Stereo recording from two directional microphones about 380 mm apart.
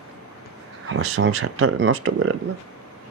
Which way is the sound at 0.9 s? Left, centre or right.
Right.